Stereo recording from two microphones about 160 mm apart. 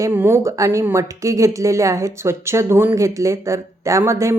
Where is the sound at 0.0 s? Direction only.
15° right (ahead or behind).